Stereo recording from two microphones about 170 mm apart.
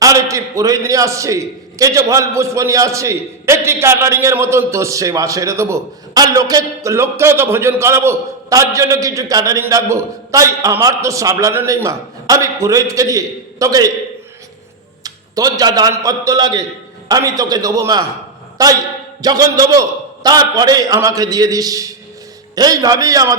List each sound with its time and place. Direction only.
0.0 s a man's voice: 20° right (ahead or behind)
15.0 s a man's voice: 20° right (ahead or behind)